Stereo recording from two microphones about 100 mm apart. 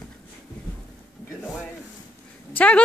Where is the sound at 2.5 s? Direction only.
15° left (ahead or behind).